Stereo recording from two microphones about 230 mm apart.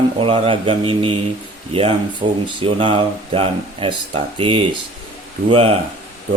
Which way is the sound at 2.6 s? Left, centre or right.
Right.